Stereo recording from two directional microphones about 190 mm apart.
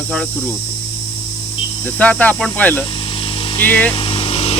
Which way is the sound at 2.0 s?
10° left (ahead or behind).